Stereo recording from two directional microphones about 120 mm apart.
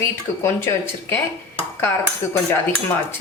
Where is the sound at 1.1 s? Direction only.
15° left (ahead or behind).